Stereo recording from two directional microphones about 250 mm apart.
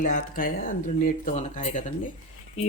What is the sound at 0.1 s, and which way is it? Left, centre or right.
Speech, left.